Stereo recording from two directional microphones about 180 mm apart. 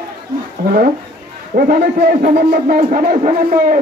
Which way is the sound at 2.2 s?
45° right (ahead or behind).